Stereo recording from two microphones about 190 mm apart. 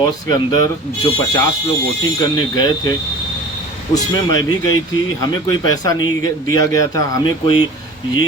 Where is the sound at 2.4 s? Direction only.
20° left (ahead or behind).